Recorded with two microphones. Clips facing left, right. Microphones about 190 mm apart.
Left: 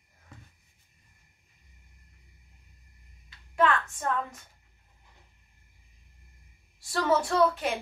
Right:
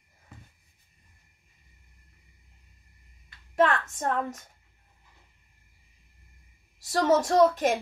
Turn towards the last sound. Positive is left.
turn(degrees=-45)  # may be behind; listen again after turning